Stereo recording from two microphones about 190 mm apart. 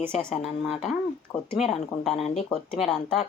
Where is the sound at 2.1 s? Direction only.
30° left (ahead or behind).